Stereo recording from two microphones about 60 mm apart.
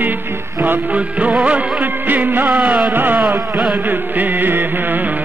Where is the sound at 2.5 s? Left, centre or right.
Centre.